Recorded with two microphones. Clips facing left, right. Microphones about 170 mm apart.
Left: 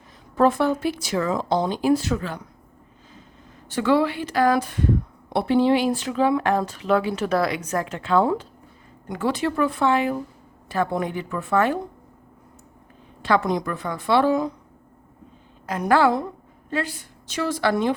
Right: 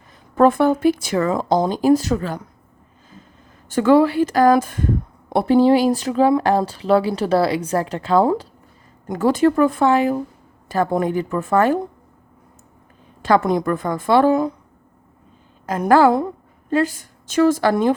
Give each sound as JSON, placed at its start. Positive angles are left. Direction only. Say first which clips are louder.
{"t": 0.3, "sound": "a woman's voice", "louder": "right 5 dB", "side_deg": -50}
{"t": 1.5, "sound": "speech", "louder": "right 5 dB", "side_deg": -40}
{"t": 3.7, "sound": "a woman's voice", "louder": "right 6 dB", "side_deg": -45}
{"t": 13.2, "sound": "a woman's voice", "louder": "right 5 dB", "side_deg": -45}
{"t": 15.6, "sound": "a woman's voice", "louder": "right 5 dB", "side_deg": -45}